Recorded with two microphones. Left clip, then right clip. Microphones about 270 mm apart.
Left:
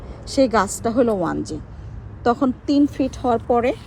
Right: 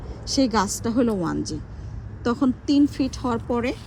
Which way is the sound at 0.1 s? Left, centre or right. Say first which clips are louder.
Left 5 dB; centre.